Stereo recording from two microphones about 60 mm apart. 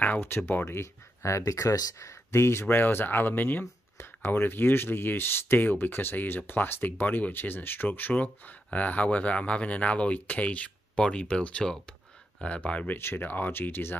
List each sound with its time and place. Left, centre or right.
0.0 s speech: left
0.7 s speech: left
8.1 s speech: left
12.9 s speech: left